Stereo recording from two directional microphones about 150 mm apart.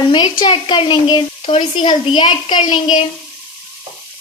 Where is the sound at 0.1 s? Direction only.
30° left (ahead or behind).